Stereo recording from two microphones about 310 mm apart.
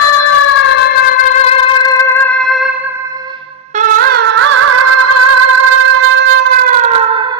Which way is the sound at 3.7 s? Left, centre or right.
Right.